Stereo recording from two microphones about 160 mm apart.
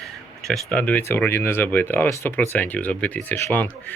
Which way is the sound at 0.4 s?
5° left (ahead or behind).